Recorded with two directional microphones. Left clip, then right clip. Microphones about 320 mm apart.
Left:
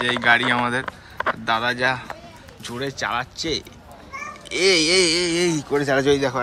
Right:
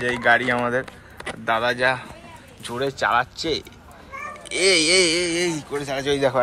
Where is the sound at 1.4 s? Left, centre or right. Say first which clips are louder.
Right 3 dB; centre.